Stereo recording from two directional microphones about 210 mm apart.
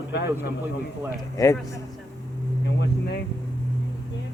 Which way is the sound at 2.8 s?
50° left (ahead or behind).